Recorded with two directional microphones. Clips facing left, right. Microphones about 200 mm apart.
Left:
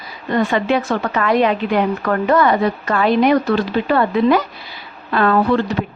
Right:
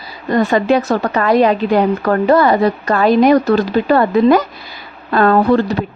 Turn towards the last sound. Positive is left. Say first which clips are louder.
# right 4 dB
turn(degrees=-40)  # may be behind; listen again after turning